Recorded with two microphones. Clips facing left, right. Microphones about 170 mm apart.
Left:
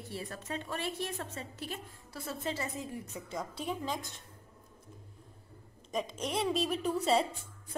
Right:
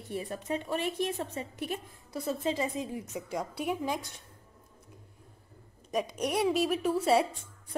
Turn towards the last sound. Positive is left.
turn(degrees=-5)  # may be behind; listen again after turning